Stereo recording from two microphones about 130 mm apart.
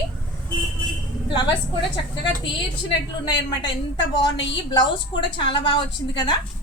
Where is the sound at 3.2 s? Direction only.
35° left (ahead or behind).